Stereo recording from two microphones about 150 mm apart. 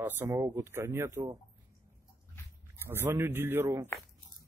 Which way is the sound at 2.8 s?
15° right (ahead or behind).